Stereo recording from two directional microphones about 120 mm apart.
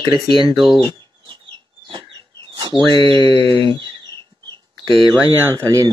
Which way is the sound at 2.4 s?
40° right (ahead or behind).